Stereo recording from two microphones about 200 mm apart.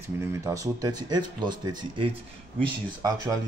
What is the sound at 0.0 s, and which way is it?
Speech, 15° right (ahead or behind).